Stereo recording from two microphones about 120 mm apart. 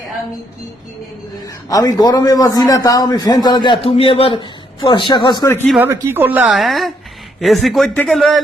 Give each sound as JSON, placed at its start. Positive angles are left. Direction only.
{"t": 1.7, "sound": "a man's voice", "side_deg": 30}
{"t": 3.8, "sound": "a man's voice", "side_deg": 55}
{"t": 5.8, "sound": "speech", "side_deg": -15}
{"t": 6.5, "sound": "speech", "side_deg": 0}